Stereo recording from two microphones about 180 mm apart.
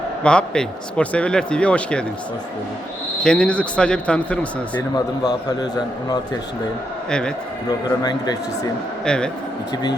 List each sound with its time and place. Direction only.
0.2 s speech: 5° left (ahead or behind)
3.2 s speech: 5° left (ahead or behind)
4.9 s a man's voice: 20° left (ahead or behind)
7.1 s speech: 5° left (ahead or behind)
7.7 s a man's voice: 20° left (ahead or behind)
9.0 s speech: 5° left (ahead or behind)